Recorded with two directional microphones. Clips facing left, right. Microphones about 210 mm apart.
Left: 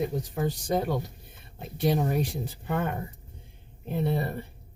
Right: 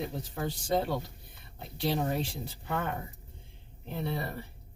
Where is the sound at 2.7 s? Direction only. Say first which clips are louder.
Left 4 dB; 20° left (ahead or behind).